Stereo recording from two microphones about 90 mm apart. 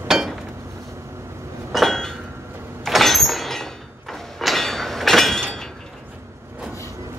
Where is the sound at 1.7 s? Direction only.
5° left (ahead or behind).